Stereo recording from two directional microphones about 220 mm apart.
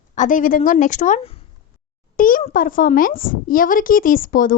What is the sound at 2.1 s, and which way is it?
A woman's voice, 40° left (ahead or behind).